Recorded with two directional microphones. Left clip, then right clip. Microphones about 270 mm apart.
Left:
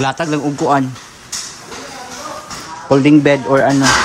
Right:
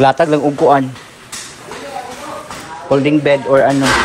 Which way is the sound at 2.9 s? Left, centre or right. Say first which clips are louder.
Left 1 dB; left.